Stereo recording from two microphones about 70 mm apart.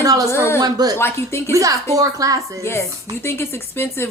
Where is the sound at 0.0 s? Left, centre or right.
Right.